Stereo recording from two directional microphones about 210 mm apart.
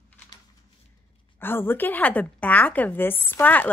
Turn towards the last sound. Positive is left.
turn(degrees=10)  # may be behind; listen again after turning